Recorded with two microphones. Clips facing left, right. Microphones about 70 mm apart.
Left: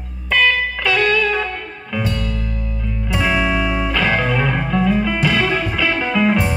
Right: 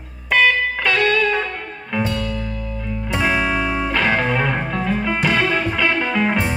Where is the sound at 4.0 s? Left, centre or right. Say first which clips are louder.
Even; centre.